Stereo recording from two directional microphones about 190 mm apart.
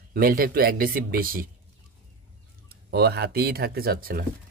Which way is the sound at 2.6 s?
60° right (ahead or behind).